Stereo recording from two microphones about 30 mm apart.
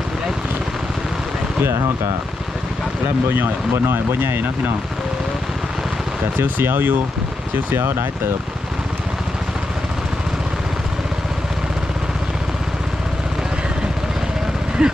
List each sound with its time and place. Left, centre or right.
6.4 s speech: right
14.8 s speech: right